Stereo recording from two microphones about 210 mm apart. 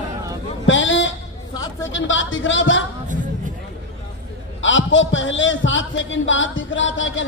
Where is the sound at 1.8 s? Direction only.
65° left (ahead or behind).